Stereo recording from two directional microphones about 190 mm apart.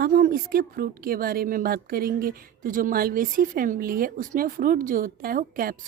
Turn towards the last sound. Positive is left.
turn(degrees=-50)  # may be behind; listen again after turning